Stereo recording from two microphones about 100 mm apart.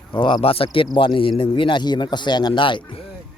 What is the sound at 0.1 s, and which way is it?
Speech, 55° left (ahead or behind).